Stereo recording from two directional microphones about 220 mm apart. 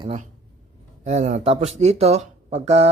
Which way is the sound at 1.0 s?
30° right (ahead or behind).